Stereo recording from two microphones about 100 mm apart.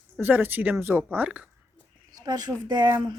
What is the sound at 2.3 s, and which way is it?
Speech, 45° right (ahead or behind).